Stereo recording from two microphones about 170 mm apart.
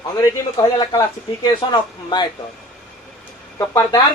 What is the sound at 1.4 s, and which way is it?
Speech, 25° left (ahead or behind).